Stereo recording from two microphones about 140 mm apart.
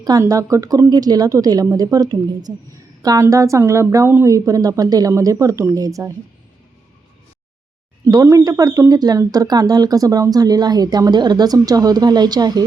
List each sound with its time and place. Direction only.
0.0 s speech: 25° right (ahead or behind)
8.0 s speech: 20° right (ahead or behind)